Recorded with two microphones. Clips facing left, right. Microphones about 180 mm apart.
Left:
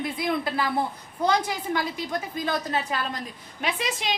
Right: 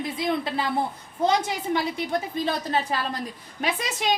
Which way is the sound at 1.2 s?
25° right (ahead or behind).